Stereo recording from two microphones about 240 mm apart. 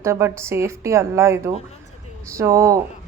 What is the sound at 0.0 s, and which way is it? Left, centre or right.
A woman's voice, centre.